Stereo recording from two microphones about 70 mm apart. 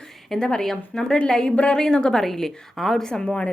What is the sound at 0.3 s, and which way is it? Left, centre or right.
A woman's voice, centre.